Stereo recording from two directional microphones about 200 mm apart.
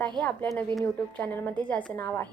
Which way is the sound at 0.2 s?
5° left (ahead or behind).